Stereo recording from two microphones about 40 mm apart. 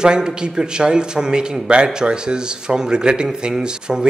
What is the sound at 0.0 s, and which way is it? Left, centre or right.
A man's voice, centre.